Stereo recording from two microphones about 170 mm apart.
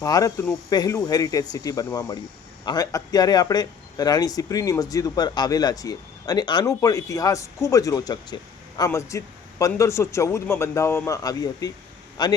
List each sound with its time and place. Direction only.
0.0 s a man's voice: 20° left (ahead or behind)